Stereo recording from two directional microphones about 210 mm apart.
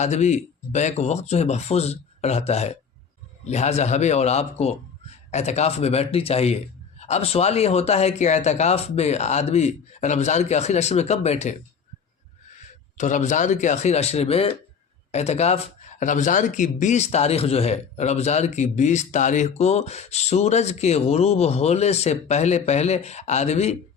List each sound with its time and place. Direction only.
0.0 s speech: 35° left (ahead or behind)
13.0 s speech: 35° left (ahead or behind)